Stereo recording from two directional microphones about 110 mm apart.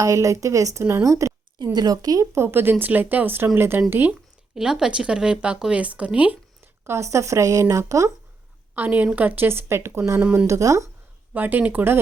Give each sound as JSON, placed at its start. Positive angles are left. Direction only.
{"t": 0.0, "sound": "speech", "side_deg": -30}
{"t": 4.5, "sound": "speech", "side_deg": -5}
{"t": 6.8, "sound": "speech", "side_deg": -25}
{"t": 8.7, "sound": "a woman's voice", "side_deg": -15}
{"t": 10.2, "sound": "speech", "side_deg": -10}
{"t": 10.4, "sound": "speech", "side_deg": -30}
{"t": 11.3, "sound": "speech", "side_deg": -15}